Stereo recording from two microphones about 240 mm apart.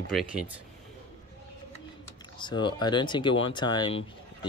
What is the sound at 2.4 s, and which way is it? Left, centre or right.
Speech, centre.